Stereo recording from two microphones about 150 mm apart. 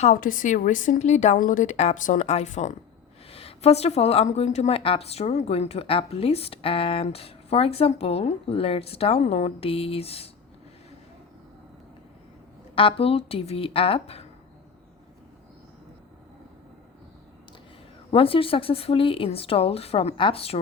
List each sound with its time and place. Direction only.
0.0 s a woman's voice: 60° left (ahead or behind); by 10.2 s 40° left (ahead or behind)
12.7 s speech: 40° left (ahead or behind)
18.1 s speech: 40° left (ahead or behind)